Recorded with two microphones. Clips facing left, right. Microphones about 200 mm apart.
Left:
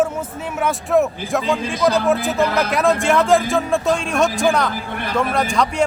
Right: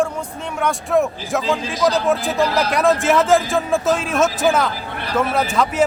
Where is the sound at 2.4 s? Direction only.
55° left (ahead or behind).